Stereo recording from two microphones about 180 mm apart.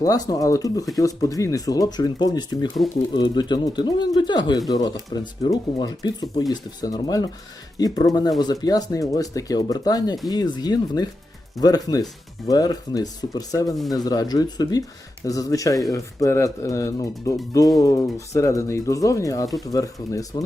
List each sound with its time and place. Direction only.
0.0 s speech: 20° left (ahead or behind)